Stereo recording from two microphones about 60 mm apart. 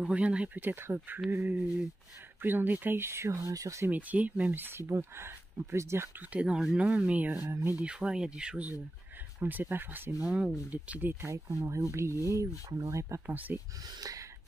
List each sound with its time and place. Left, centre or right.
0.0 s speech: centre
0.6 s speech: right
3.9 s speech: right
4.7 s speech: right
6.3 s speech: centre
9.4 s speech: right
10.2 s speech: right
11.2 s speech: right
13.3 s speech: right
14.0 s a sound: right